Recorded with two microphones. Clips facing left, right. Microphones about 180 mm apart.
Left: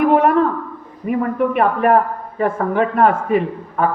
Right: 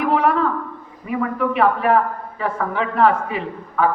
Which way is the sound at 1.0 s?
50° left (ahead or behind).